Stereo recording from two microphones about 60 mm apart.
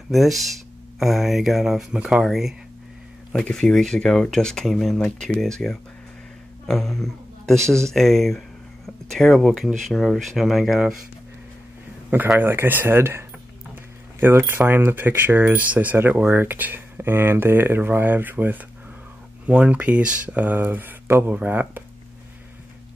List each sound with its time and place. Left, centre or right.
0.1 s speech: centre
3.5 s a woman's voice: centre
12.1 s speech: right
14.2 s speech: right
19.4 s speech: right